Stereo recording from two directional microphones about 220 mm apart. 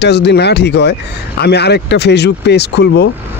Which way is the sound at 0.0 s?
50° left (ahead or behind).